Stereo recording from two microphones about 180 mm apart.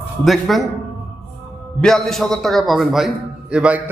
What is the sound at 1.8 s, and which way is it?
A man's voice, centre (ahead or behind).